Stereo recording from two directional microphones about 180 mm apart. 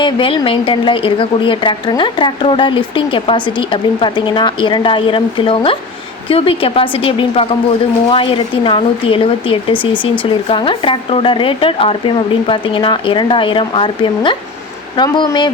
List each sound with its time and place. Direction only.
0.0 s a woman's voice: 30° left (ahead or behind)